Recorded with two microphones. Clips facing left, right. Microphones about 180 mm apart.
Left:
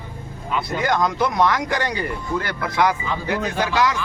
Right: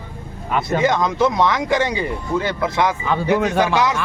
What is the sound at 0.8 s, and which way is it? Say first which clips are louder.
Speech: right 2 dB; 20° right (ahead or behind).